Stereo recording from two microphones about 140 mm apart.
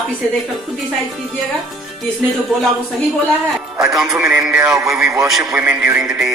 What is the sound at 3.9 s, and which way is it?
Speech, centre (ahead or behind).